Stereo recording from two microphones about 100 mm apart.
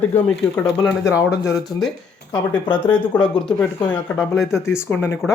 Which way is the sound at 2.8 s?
15° left (ahead or behind).